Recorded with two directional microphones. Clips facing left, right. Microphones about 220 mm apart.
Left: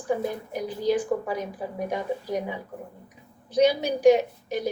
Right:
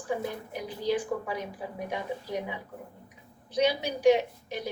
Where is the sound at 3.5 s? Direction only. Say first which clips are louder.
Left 6 dB; 45° left (ahead or behind).